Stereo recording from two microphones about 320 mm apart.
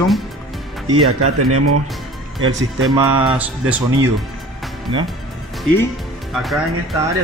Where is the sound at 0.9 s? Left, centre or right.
Right.